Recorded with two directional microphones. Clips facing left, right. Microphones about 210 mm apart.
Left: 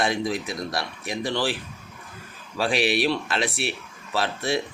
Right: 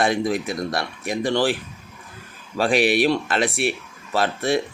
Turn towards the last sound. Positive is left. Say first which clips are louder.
# right 4 dB
turn(degrees=-50)  # may be behind; listen again after turning